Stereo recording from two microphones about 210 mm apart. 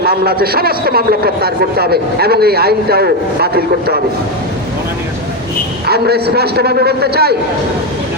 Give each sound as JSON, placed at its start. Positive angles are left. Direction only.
{"t": 0.0, "sound": "a man's voice", "side_deg": -45}
{"t": 5.8, "sound": "a man's voice", "side_deg": -50}